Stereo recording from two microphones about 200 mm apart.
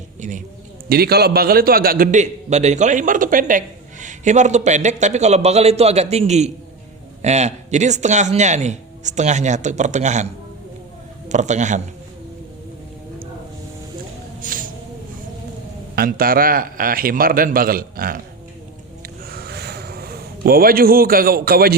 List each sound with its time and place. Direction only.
0.2 s a man's voice: 40° right (ahead or behind)
0.9 s a man's voice: 50° right (ahead or behind)
11.3 s speech: 35° right (ahead or behind)
14.4 s a sound: 40° right (ahead or behind)
16.0 s a man's voice: 45° right (ahead or behind)
19.0 s a sound: 50° right (ahead or behind)